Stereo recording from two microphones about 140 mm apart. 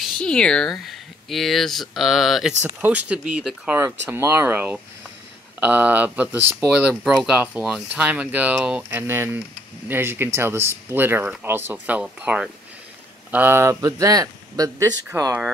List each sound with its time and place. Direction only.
0.2 s speech: 5° left (ahead or behind); by 6.7 s 15° right (ahead or behind)
6.9 s a man's voice: centre (ahead or behind); by 15.3 s 20° right (ahead or behind)